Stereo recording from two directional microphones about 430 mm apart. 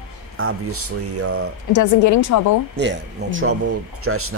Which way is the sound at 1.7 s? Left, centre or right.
Left.